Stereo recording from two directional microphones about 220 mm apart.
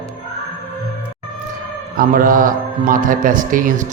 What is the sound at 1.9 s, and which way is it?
Speech, 40° right (ahead or behind).